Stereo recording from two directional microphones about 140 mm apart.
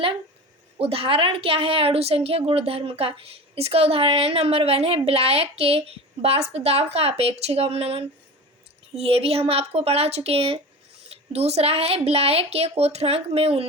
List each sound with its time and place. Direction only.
0.8 s a woman's voice: 45° right (ahead or behind)